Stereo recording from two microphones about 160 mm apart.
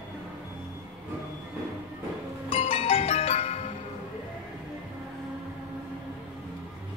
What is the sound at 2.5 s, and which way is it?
Music, 40° left (ahead or behind).